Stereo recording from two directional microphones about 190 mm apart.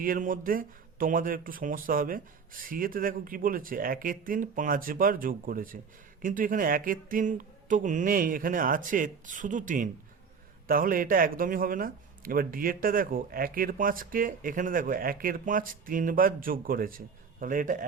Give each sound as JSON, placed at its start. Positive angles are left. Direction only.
{"t": 0.0, "sound": "a man's voice", "side_deg": -45}